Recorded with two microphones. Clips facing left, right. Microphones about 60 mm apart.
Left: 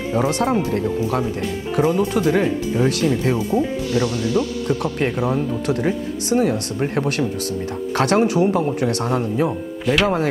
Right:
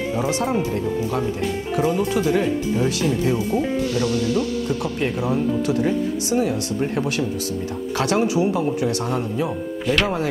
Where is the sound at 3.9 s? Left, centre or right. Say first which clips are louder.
Left 1 dB; left.